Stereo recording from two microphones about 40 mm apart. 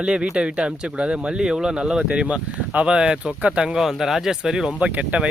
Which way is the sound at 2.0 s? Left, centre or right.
Right.